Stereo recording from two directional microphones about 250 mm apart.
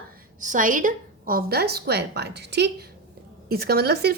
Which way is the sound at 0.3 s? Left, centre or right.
Right.